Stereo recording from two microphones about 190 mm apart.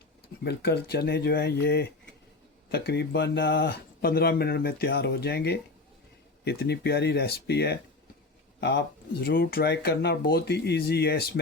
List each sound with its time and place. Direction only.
0.4 s speech: 60° left (ahead or behind)
9.2 s speech: 50° left (ahead or behind)